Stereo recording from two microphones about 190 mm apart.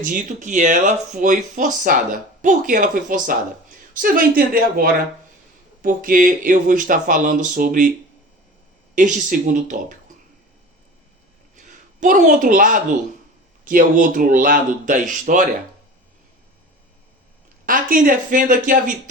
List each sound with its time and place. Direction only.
0.0 s speech: 45° right (ahead or behind)
9.0 s speech: 40° right (ahead or behind)
11.5 s speech: 40° right (ahead or behind)
17.7 s speech: 45° right (ahead or behind)